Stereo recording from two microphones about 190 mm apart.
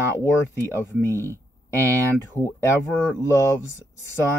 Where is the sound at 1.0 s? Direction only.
15° left (ahead or behind).